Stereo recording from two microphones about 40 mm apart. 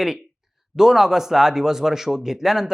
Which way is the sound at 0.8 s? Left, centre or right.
Centre.